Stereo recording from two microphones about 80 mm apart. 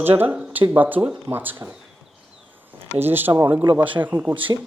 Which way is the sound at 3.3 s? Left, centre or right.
Right.